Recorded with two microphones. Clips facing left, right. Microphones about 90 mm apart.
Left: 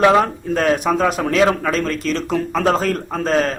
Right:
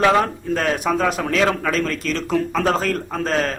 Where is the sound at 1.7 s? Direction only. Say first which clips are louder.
Left 2 dB; centre (ahead or behind).